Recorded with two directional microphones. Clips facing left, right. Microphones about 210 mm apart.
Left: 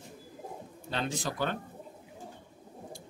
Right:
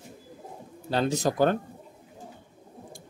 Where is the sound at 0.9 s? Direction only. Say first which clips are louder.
Right 9 dB; 40° right (ahead or behind).